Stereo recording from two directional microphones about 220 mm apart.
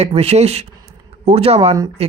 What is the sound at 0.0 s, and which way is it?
Speech, 30° right (ahead or behind).